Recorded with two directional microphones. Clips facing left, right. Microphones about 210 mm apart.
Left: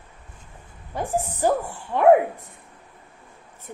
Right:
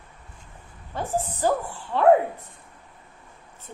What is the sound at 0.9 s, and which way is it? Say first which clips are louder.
A woman's voice: left 2 dB; 15° left (ahead or behind).